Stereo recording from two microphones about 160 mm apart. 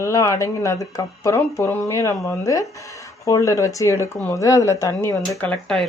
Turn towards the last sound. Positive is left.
turn(degrees=5)  # may be behind; listen again after turning